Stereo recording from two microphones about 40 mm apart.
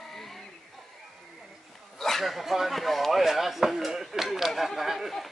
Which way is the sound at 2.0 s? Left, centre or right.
Centre.